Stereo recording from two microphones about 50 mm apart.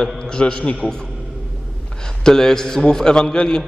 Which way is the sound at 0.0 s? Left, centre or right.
Centre.